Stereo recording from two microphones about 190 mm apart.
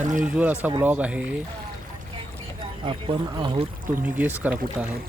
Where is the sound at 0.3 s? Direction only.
10° right (ahead or behind).